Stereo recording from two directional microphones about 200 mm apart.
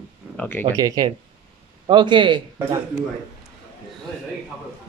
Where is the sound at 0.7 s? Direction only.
15° right (ahead or behind).